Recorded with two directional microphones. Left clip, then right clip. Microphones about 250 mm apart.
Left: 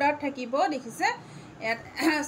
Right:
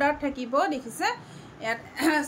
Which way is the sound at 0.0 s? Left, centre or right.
Centre.